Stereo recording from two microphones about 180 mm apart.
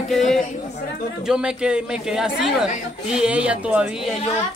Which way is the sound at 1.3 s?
5° right (ahead or behind).